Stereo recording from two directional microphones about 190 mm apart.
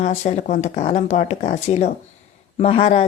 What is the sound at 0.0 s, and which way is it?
Speech, 35° left (ahead or behind).